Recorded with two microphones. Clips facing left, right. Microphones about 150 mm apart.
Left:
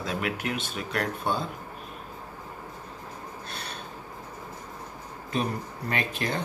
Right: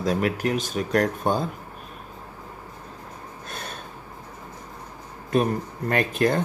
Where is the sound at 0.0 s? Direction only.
40° right (ahead or behind).